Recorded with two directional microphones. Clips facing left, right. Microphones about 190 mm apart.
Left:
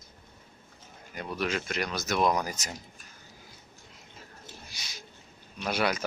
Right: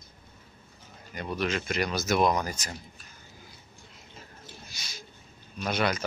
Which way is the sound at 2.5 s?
20° left (ahead or behind).